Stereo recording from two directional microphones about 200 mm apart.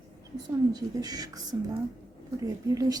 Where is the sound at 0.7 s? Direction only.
20° right (ahead or behind).